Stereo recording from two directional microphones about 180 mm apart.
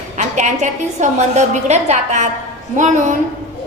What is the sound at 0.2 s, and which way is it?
A woman's voice, 40° right (ahead or behind).